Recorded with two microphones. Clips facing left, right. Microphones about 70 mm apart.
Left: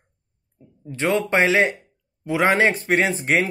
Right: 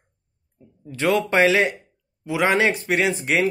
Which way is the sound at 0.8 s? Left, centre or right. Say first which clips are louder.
Right 1 dB; left.